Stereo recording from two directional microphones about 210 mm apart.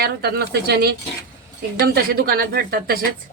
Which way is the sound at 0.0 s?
50° right (ahead or behind).